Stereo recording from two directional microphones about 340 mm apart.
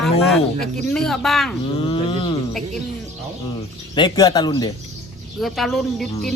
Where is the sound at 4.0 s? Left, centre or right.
Centre.